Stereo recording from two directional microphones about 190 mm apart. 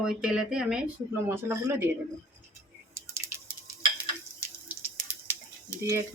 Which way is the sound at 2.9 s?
15° right (ahead or behind).